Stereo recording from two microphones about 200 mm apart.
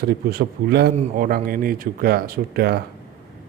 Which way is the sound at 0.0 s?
50° right (ahead or behind).